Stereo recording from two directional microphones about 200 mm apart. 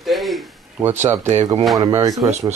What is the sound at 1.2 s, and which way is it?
Speech, 35° right (ahead or behind).